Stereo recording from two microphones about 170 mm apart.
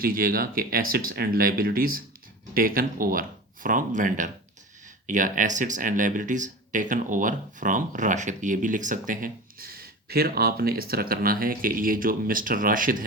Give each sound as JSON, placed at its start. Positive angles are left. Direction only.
{"t": 0.0, "sound": "speech", "side_deg": -60}